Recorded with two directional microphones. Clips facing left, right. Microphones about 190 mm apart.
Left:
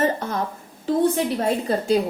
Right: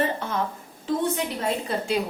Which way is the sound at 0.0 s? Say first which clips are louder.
Left 4 dB; 40° left (ahead or behind).